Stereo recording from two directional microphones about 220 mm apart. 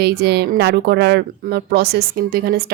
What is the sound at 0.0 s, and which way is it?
Speech, 45° right (ahead or behind).